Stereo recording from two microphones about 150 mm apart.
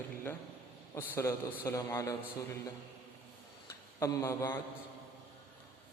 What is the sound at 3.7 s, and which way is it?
Speech, 20° left (ahead or behind).